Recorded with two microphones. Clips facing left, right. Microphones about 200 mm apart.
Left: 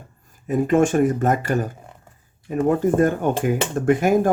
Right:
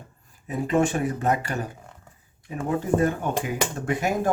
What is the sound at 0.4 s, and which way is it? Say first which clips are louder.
Speech: left 5 dB; 50° left (ahead or behind).